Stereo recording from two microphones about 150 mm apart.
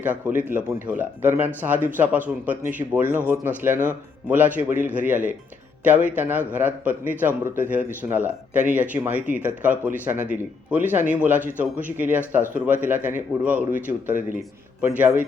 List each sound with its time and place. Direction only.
0.0 s speech: 10° right (ahead or behind)